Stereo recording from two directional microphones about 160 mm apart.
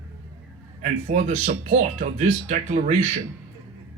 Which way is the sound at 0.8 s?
45° right (ahead or behind).